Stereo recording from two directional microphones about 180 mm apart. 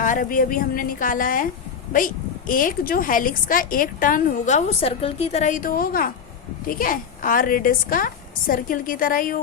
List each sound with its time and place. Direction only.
0.0 s a woman's voice: 50° left (ahead or behind)